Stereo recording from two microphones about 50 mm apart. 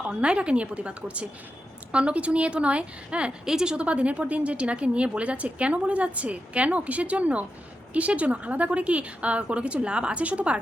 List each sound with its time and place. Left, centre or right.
0.0 s a woman's voice: right